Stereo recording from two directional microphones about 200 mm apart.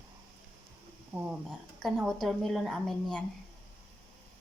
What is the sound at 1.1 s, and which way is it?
A woman's voice, 5° right (ahead or behind).